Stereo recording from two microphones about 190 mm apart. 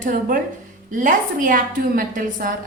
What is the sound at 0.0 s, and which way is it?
A woman's voice, 45° right (ahead or behind).